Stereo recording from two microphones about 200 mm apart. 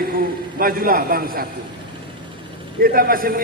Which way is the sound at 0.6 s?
45° right (ahead or behind).